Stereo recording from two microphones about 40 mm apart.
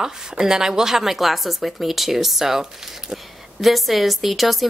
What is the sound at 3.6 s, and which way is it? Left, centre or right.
Speech, centre.